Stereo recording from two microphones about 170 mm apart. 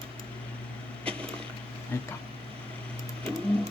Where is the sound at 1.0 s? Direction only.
5° left (ahead or behind).